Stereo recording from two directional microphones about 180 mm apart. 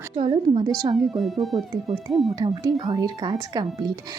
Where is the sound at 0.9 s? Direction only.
Centre (ahead or behind).